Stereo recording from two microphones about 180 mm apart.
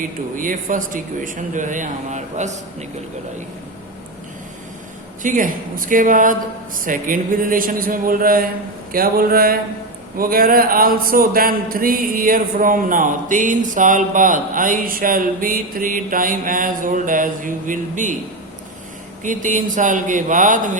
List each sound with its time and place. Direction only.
0.3 s speech: 50° right (ahead or behind)
5.2 s speech: 45° right (ahead or behind)
8.9 s a sound: 55° right (ahead or behind)
10.2 s speech: 55° right (ahead or behind)
19.2 s speech: 45° right (ahead or behind)